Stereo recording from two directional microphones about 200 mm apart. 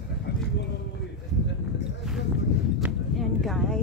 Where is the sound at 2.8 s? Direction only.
Centre (ahead or behind).